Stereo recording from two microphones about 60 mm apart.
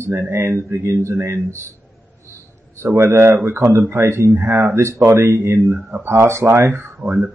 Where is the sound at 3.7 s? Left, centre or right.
Right.